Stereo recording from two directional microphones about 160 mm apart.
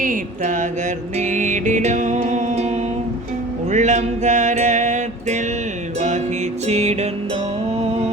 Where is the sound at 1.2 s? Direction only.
50° right (ahead or behind).